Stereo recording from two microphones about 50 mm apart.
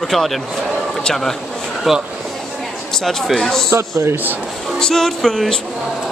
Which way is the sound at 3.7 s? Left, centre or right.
Right.